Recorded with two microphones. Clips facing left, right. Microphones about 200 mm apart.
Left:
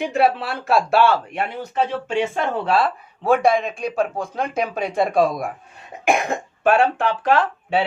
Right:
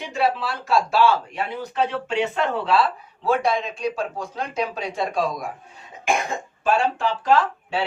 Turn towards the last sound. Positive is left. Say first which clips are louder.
# left 1 dB
turn(degrees=60)  # may be behind; listen again after turning